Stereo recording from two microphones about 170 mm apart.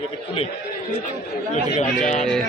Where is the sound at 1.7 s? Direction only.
45° left (ahead or behind).